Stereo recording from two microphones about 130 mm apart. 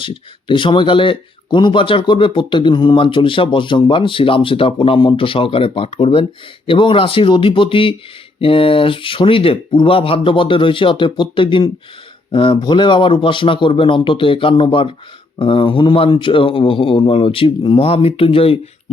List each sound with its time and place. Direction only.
0.0 s speech: 40° left (ahead or behind)